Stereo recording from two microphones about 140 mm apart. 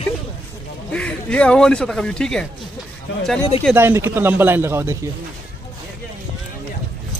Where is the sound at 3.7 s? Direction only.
20° right (ahead or behind).